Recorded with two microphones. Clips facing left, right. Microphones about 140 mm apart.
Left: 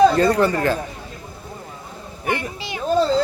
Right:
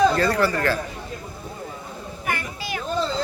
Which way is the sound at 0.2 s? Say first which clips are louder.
Left 4 dB; 20° left (ahead or behind).